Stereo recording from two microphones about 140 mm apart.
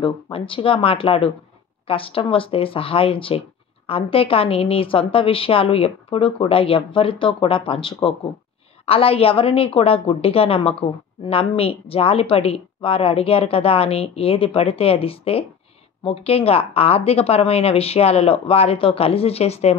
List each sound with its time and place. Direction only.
0.0 s a woman's voice: 40° left (ahead or behind)